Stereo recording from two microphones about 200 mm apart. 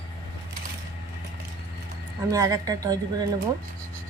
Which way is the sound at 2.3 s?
15° right (ahead or behind).